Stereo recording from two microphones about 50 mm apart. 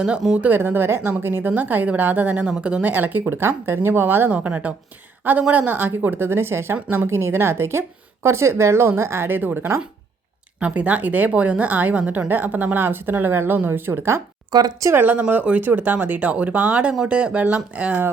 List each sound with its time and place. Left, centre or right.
0.5 s a woman's voice: right
2.4 s a woman's voice: right
2.8 s a woman's voice: right
3.2 s a woman's voice: right
4.3 s a woman's voice: right
9.3 s a woman's voice: right
14.9 s a woman's voice: right